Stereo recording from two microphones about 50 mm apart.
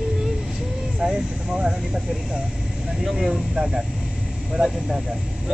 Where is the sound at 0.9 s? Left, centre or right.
Centre.